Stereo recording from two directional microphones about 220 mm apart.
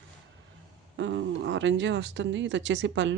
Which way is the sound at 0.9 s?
55° right (ahead or behind).